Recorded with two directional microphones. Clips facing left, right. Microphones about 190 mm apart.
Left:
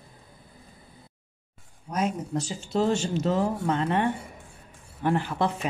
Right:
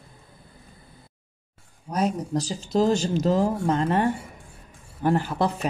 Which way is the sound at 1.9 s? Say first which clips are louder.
Right 3 dB; 35° right (ahead or behind).